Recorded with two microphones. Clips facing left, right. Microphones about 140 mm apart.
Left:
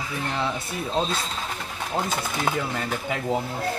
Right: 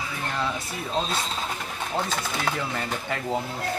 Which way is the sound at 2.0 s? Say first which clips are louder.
Left 2 dB; 10° left (ahead or behind).